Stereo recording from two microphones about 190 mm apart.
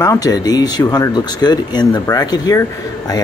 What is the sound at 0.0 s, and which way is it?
Speech, 20° left (ahead or behind).